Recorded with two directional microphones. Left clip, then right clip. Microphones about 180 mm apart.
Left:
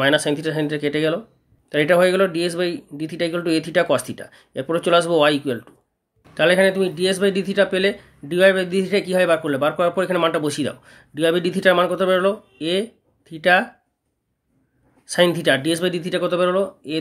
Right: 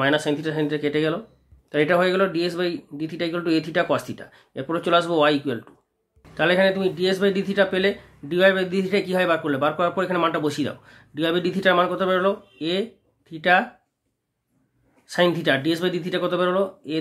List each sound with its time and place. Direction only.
0.0 s speech: 40° left (ahead or behind)
15.0 s speech: 35° left (ahead or behind)